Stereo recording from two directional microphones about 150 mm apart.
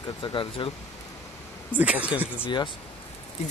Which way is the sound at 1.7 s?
10° right (ahead or behind).